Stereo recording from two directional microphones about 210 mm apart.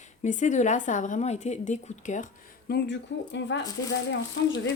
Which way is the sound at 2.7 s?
60° left (ahead or behind).